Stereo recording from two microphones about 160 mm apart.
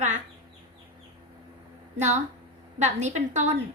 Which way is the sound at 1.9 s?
45° right (ahead or behind).